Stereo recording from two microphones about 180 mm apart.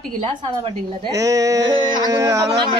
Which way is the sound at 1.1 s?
20° right (ahead or behind).